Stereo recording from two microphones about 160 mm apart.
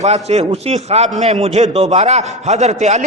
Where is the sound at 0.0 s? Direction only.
45° right (ahead or behind).